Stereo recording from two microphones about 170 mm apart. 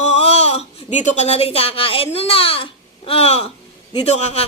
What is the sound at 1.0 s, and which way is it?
A man's voice, 40° left (ahead or behind).